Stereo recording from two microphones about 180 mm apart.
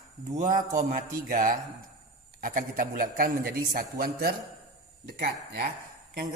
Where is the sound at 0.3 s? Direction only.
50° right (ahead or behind).